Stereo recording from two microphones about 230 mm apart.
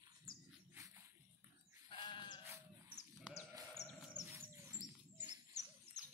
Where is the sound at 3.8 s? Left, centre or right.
Left.